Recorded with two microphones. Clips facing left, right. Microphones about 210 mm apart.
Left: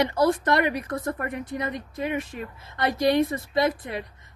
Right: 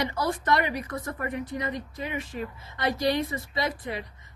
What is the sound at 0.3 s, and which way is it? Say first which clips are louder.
Speech: left 4 dB; 60° left (ahead or behind).